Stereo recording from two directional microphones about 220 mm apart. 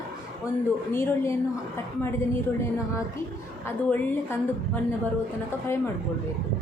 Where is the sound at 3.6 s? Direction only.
10° left (ahead or behind).